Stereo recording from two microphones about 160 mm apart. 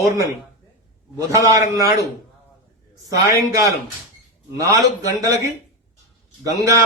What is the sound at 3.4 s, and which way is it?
A man's voice, 20° right (ahead or behind).